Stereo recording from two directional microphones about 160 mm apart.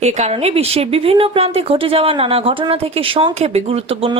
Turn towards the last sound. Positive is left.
turn(degrees=-35)  # may be behind; listen again after turning